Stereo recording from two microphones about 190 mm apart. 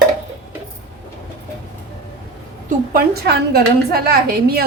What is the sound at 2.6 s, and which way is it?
A woman's voice, 50° right (ahead or behind).